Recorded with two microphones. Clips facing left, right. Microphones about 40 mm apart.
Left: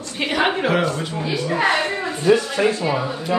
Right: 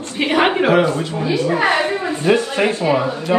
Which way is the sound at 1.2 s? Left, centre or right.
Right.